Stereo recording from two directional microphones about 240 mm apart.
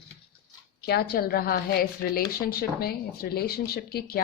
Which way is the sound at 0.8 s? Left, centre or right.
Left.